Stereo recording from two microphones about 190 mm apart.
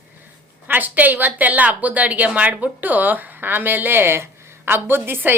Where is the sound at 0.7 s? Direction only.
10° right (ahead or behind).